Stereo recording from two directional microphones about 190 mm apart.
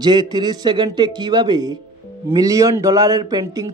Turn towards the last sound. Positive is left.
turn(degrees=-20)  # may be behind; listen again after turning